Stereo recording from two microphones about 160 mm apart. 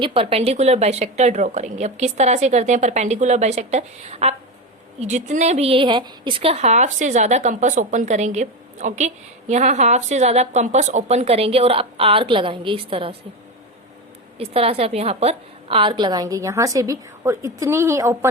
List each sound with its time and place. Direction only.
0.0 s a woman's voice: 35° right (ahead or behind)
14.3 s a woman's voice: 40° right (ahead or behind); by 18.3 s 20° right (ahead or behind)